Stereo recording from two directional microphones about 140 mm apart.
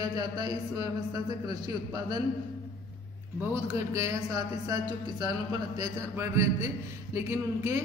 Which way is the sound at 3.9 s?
25° right (ahead or behind).